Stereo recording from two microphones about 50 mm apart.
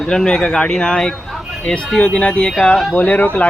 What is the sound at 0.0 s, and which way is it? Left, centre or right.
Speech, centre.